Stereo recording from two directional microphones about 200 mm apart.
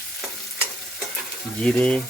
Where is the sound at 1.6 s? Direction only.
5° left (ahead or behind).